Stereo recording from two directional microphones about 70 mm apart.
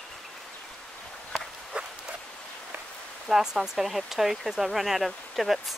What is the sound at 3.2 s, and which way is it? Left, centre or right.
Speech, centre.